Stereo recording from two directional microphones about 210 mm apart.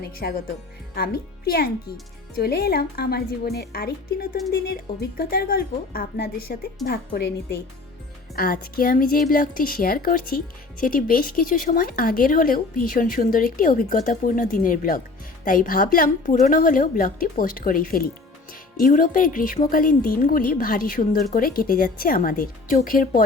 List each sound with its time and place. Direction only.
0.0 s a woman's voice: 45° left (ahead or behind)
8.4 s a woman's voice: 45° left (ahead or behind)